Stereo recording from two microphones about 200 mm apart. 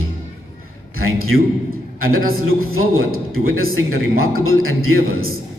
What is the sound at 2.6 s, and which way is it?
A man's voice, 90° right.